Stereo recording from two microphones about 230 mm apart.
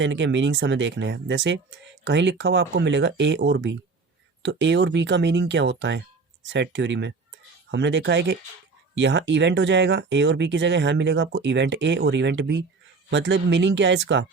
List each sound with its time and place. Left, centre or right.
0.0 s speech: right